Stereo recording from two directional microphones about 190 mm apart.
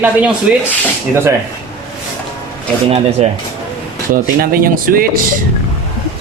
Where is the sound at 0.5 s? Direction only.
5° right (ahead or behind).